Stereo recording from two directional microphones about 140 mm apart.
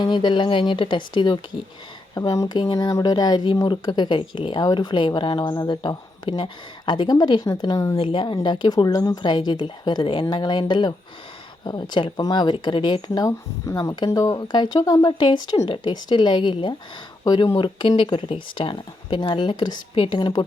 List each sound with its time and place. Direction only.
0.0 s speech: 35° left (ahead or behind)